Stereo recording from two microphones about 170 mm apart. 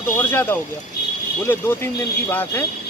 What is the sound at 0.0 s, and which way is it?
Speech, 10° left (ahead or behind).